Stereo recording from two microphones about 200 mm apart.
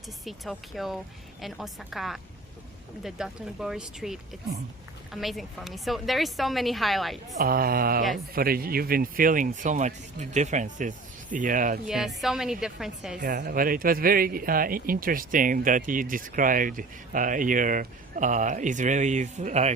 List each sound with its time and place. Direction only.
0.3 s a woman's voice: centre (ahead or behind)
7.3 s speech: 50° right (ahead or behind)
11.9 s a woman's voice: centre (ahead or behind)
13.2 s speech: 45° right (ahead or behind)